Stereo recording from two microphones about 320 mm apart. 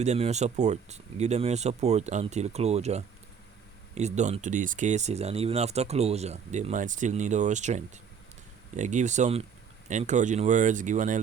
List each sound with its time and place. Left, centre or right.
0.0 s speech: right